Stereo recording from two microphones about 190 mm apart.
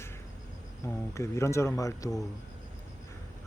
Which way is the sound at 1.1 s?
15° left (ahead or behind).